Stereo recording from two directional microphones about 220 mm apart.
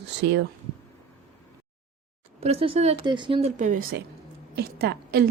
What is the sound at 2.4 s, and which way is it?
A woman's voice, 25° right (ahead or behind).